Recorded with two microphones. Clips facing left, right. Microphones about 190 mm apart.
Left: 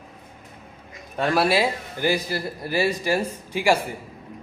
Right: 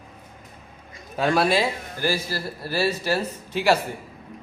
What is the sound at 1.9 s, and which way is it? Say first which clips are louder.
A man's voice: left 2 dB; 20° left (ahead or behind).